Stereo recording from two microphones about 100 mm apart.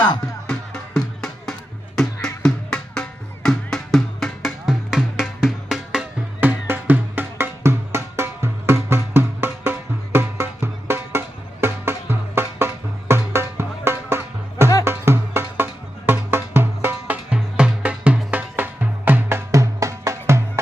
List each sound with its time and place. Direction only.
0.4 s music: 10° left (ahead or behind)
6.4 s music: 15° right (ahead or behind)
17.2 s music: 10° right (ahead or behind)
19.5 s music: 30° right (ahead or behind)